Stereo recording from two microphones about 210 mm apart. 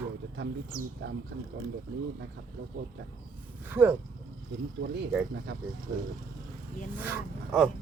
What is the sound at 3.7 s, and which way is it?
Speech, 10° right (ahead or behind).